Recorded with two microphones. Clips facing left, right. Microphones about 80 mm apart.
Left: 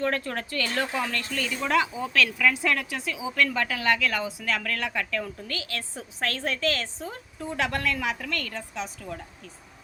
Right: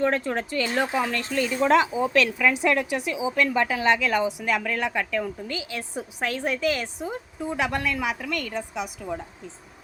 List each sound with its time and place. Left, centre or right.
0.0 s speech: centre